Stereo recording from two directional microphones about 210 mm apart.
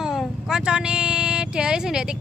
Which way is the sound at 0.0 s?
Centre (ahead or behind).